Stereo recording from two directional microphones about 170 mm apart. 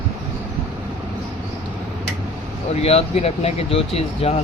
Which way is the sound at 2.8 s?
35° left (ahead or behind).